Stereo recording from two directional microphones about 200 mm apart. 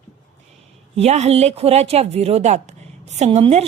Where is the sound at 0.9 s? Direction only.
35° right (ahead or behind).